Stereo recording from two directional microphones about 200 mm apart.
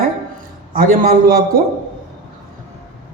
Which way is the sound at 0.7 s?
45° right (ahead or behind).